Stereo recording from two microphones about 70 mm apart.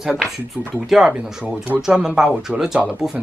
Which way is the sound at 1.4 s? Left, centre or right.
Centre.